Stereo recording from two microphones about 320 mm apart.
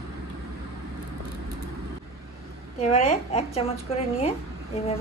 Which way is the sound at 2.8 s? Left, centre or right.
Centre.